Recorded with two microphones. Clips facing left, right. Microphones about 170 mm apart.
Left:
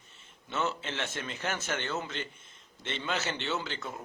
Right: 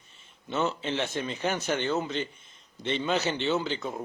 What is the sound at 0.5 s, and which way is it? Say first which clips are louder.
Speech: right 5 dB; 15° right (ahead or behind).